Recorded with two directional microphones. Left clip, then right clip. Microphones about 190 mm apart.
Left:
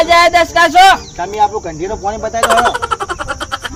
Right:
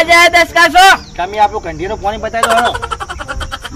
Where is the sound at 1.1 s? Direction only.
10° right (ahead or behind).